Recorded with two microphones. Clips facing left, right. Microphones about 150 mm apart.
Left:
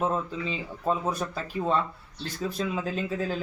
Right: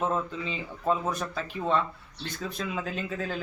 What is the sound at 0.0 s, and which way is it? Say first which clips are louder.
Speech: left 1 dB; 5° left (ahead or behind).